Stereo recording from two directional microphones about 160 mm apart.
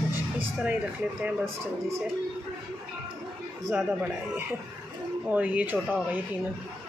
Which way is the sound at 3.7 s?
10° right (ahead or behind).